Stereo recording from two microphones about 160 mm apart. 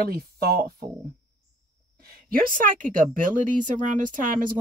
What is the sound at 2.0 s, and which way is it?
Speech, 65° right (ahead or behind).